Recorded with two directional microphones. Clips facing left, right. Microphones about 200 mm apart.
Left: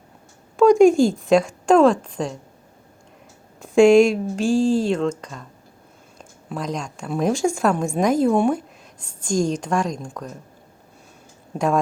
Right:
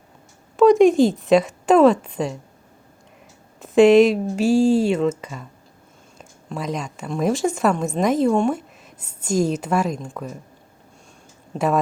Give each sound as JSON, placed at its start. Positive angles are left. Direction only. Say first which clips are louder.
{"t": 0.5, "sound": "a woman's voice", "louder": "even", "side_deg": 0}
{"t": 3.6, "sound": "a woman's voice", "louder": "even", "side_deg": 0}
{"t": 11.5, "sound": "a woman's voice", "louder": "even", "side_deg": -5}